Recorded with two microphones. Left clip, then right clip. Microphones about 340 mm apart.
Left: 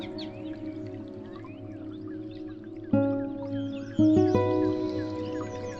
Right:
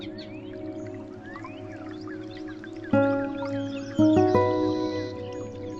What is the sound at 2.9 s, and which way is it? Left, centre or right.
Music, right.